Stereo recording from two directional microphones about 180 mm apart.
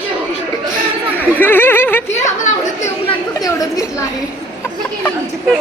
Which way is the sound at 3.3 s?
20° left (ahead or behind).